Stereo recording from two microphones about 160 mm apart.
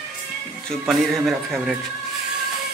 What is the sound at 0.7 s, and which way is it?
Speech, centre (ahead or behind).